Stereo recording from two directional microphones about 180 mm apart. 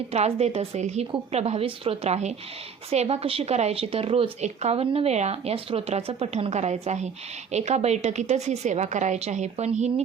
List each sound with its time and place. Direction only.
0.1 s speech: 35° right (ahead or behind)